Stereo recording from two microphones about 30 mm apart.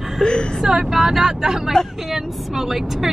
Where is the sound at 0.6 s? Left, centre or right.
Centre.